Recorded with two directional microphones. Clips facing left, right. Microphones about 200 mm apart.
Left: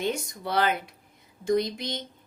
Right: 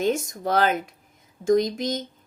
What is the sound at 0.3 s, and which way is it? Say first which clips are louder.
Speech: right 4 dB; 45° right (ahead or behind).